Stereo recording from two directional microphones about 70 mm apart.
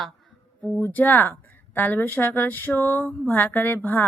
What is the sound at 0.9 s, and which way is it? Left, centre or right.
A woman's voice, left.